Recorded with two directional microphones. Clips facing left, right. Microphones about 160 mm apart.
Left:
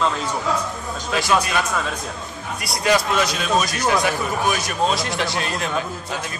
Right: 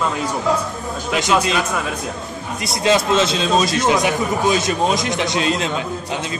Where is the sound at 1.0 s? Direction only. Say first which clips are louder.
Right 2 dB; 20° right (ahead or behind).